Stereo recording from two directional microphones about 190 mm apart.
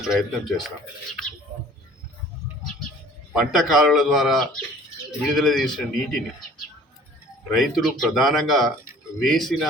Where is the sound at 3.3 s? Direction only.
Centre (ahead or behind).